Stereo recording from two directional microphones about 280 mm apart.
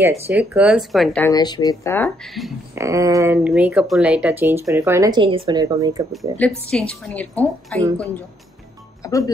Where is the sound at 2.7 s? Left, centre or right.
Centre.